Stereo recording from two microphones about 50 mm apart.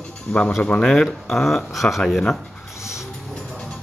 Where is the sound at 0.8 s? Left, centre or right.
Centre.